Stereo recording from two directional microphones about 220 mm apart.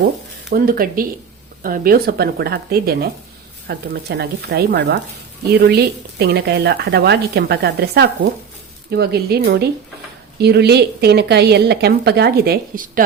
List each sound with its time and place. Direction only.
0.5 s speech: 40° right (ahead or behind)